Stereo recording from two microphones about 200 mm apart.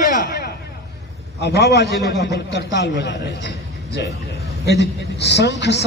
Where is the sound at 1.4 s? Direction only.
55° left (ahead or behind).